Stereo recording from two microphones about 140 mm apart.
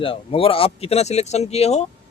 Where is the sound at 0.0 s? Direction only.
40° left (ahead or behind).